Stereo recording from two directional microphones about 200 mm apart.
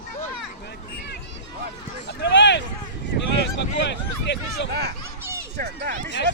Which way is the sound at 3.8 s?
60° left (ahead or behind).